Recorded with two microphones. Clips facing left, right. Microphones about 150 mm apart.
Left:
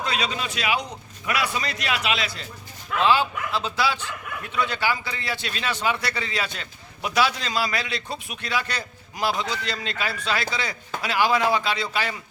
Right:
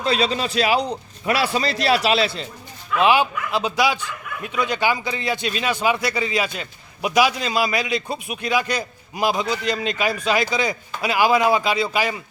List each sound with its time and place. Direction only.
0.0 s a man's voice: 35° right (ahead or behind)
3.0 s a man's voice: 15° right (ahead or behind)